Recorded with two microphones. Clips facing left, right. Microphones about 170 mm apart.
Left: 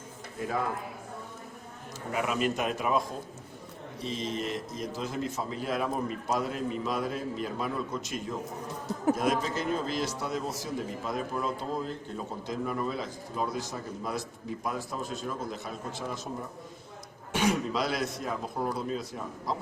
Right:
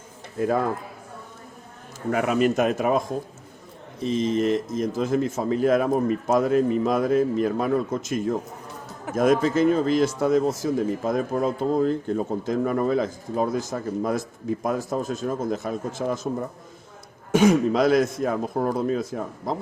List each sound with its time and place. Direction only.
2.1 s a man's voice: 55° right (ahead or behind)
4.2 s a man's voice: 50° right (ahead or behind)
17.3 s a man's voice: 50° right (ahead or behind)